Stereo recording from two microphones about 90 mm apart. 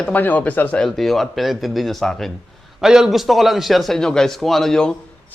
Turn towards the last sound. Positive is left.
turn(degrees=5)  # may be behind; listen again after turning